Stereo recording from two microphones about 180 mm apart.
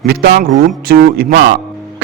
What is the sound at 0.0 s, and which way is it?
A man's voice, 60° right (ahead or behind).